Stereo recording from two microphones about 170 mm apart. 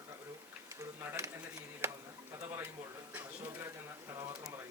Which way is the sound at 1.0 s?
15° right (ahead or behind).